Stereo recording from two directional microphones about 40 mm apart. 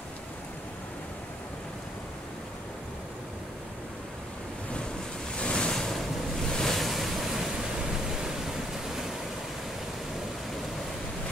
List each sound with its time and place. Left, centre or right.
5.4 s waves: left
5.7 s waves: centre